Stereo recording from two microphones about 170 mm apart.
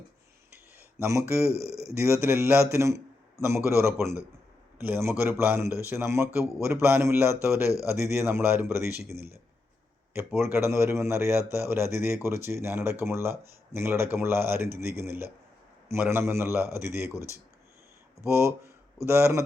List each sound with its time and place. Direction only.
0.9 s a man's voice: 15° right (ahead or behind)
1.5 s speech: 70° right (ahead or behind)
2.0 s a man's voice: 15° right (ahead or behind)
18.3 s a man's voice: 15° right (ahead or behind)